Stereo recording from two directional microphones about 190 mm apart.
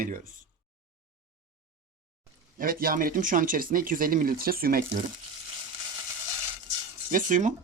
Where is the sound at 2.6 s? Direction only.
50° right (ahead or behind).